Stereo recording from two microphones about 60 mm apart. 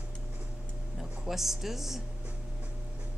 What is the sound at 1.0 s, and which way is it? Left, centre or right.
Speech, centre.